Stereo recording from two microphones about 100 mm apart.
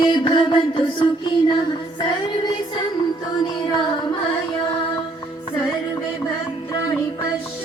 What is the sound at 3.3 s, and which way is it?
Music, 45° left (ahead or behind).